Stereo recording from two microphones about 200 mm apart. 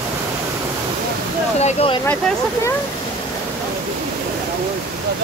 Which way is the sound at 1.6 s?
30° left (ahead or behind).